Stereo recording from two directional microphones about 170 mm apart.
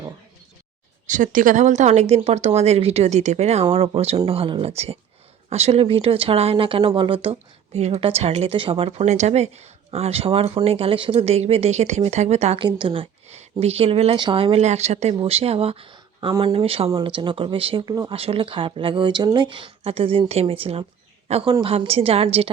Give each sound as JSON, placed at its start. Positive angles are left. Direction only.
{"t": 1.0, "sound": "speech", "side_deg": -50}
{"t": 18.1, "sound": "a woman's voice", "side_deg": -35}